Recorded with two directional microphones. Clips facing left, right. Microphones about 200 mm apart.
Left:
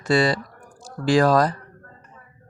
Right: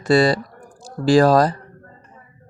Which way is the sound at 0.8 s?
35° right (ahead or behind).